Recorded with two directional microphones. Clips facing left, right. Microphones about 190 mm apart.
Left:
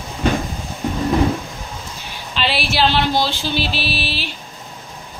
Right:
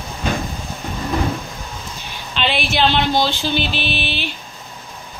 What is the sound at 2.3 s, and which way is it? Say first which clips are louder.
Speech: even; 5° left (ahead or behind).